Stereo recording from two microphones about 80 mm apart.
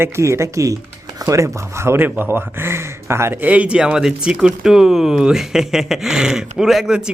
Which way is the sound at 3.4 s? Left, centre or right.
Centre.